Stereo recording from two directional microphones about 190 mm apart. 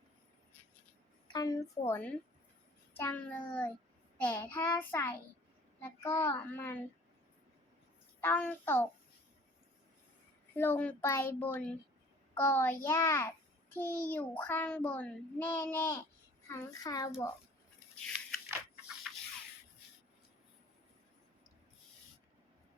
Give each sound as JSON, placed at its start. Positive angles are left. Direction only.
{"t": 1.3, "sound": "a child's voice", "side_deg": 20}
{"t": 1.9, "sound": "child singing", "side_deg": 10}
{"t": 8.2, "sound": "child singing", "side_deg": 10}
{"t": 10.5, "sound": "child singing", "side_deg": 10}
{"t": 16.5, "sound": "a child's voice", "side_deg": 20}
{"t": 18.0, "sound": "a sound", "side_deg": 5}